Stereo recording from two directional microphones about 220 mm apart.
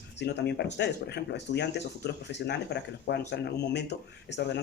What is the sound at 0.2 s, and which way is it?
Speech, 50° left (ahead or behind).